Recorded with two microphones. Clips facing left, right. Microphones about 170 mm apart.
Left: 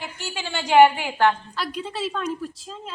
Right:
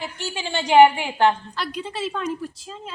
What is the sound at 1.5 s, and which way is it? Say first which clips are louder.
A woman's voice: even; centre (ahead or behind).